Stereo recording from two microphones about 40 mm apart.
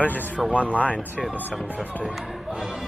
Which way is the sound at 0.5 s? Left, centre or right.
Left.